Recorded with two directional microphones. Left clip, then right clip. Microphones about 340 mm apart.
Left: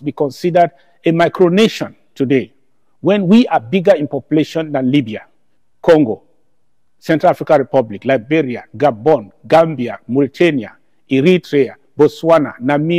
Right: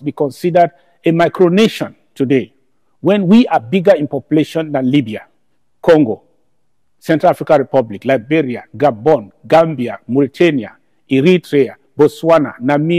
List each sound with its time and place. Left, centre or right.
0.0 s a man's voice: right